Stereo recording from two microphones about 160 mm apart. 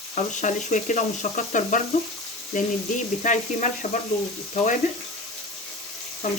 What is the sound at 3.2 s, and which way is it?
Speech, 50° left (ahead or behind).